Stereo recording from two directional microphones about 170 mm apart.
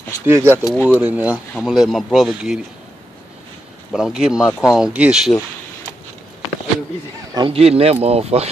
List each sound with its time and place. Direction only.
0.3 s speech: 15° right (ahead or behind)
0.7 s speech: 10° left (ahead or behind)
1.0 s a man's voice: 5° right (ahead or behind)
3.9 s a man's voice: 5° right (ahead or behind)
7.3 s speech: 35° right (ahead or behind)